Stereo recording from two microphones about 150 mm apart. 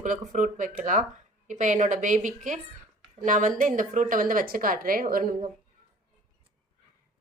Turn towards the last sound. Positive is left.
turn(degrees=-70)  # may be behind; listen again after turning